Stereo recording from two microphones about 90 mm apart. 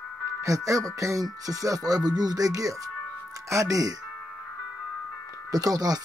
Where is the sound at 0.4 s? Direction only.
40° right (ahead or behind).